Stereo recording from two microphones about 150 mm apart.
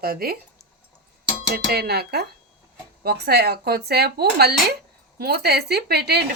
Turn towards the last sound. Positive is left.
turn(degrees=-90)